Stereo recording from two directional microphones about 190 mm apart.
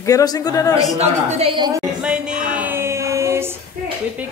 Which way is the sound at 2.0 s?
5° right (ahead or behind).